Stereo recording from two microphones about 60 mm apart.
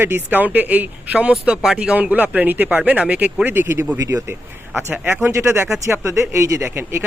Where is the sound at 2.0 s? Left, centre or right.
Right.